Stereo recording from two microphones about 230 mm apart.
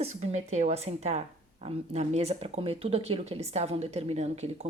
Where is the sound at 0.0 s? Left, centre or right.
Right.